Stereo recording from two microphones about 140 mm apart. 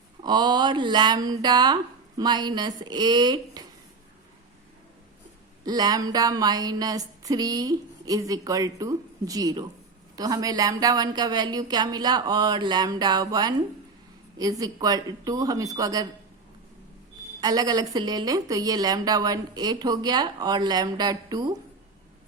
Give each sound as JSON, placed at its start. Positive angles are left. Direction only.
{"t": 0.2, "sound": "speech", "side_deg": -30}
{"t": 5.6, "sound": "speech", "side_deg": -30}
{"t": 17.4, "sound": "speech", "side_deg": -25}